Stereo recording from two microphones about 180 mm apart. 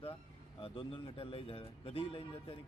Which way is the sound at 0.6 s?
30° left (ahead or behind).